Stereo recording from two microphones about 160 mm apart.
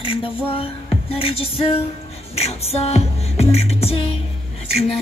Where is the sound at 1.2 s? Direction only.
35° left (ahead or behind).